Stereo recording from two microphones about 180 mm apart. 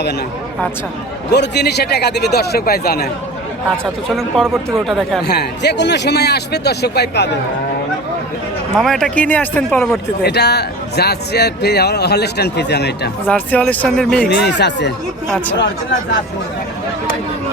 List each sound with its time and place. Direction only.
1.3 s speech: 70° left (ahead or behind)
4.1 s speech: centre (ahead or behind)
5.2 s speech: 65° left (ahead or behind)
8.8 s speech: centre (ahead or behind)
10.2 s speech: 65° left (ahead or behind)
13.2 s speech: 10° left (ahead or behind)
14.3 s speech: 70° left (ahead or behind)
15.5 s speech: 85° left